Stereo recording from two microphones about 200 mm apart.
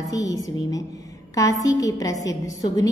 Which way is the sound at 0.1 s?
20° left (ahead or behind).